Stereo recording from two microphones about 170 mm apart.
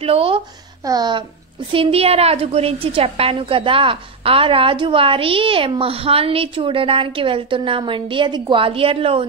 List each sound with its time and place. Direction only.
0.0 s a woman's voice: 35° right (ahead or behind)